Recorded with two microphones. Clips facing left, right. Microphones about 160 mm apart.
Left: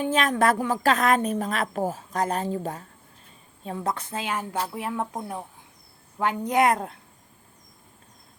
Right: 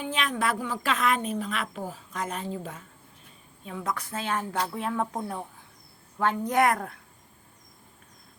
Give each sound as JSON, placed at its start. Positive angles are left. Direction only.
{"t": 0.0, "sound": "a woman's voice", "side_deg": 45}